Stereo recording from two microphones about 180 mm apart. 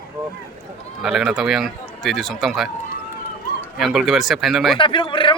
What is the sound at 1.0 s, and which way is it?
A man's voice, centre (ahead or behind).